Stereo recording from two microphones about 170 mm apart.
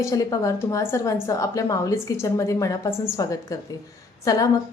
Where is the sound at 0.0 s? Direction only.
20° left (ahead or behind).